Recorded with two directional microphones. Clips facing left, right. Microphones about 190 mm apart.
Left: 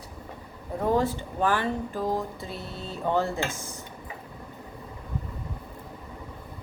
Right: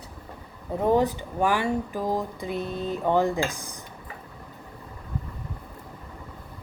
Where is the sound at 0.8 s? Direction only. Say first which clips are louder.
Right 3 dB; 20° right (ahead or behind).